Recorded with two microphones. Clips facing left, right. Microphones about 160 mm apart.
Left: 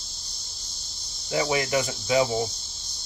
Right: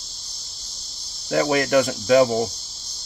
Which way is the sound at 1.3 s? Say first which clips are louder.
Right 6 dB; 60° right (ahead or behind).